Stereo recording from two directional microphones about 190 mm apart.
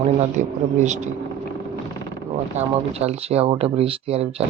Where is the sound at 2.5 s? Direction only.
35° right (ahead or behind).